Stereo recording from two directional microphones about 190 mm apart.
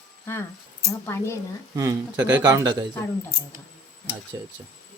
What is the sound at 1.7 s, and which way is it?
A man's voice, 15° right (ahead or behind).